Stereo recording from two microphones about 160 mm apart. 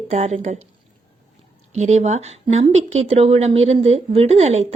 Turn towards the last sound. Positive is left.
turn(degrees=-45)  # may be behind; listen again after turning